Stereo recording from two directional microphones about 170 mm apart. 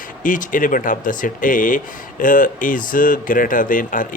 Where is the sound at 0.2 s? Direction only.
50° left (ahead or behind).